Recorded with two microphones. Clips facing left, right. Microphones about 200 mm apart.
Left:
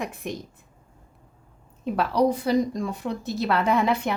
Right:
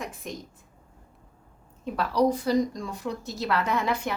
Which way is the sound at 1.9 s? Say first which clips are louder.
Left 2 dB; 60° left (ahead or behind).